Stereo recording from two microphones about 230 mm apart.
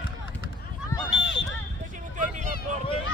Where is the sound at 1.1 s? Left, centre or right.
Left.